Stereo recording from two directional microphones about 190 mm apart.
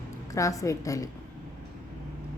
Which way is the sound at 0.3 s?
15° left (ahead or behind).